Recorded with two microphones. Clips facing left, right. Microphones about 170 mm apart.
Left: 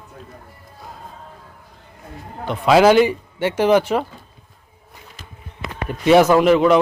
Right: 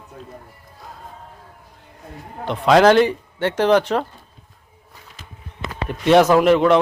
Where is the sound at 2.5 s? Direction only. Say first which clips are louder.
Even; 5° left (ahead or behind).